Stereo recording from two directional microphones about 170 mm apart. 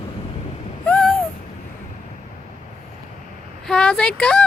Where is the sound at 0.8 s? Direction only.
5° left (ahead or behind).